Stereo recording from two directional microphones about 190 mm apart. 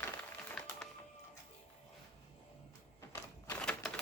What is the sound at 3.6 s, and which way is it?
Typewriter, 5° left (ahead or behind).